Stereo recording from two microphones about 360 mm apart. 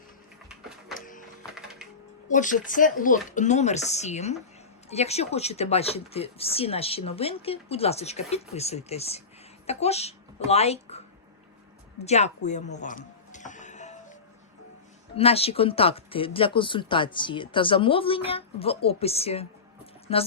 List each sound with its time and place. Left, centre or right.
0.9 s a sound: left
1.5 s music: centre
2.3 s a woman's voice: left
12.0 s speech: centre
12.8 s music: left
15.1 s speech: centre